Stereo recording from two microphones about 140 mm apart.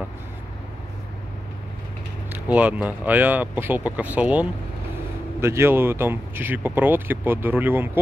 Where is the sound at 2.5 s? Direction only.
10° right (ahead or behind).